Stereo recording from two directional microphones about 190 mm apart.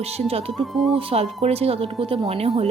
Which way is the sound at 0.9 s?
30° right (ahead or behind).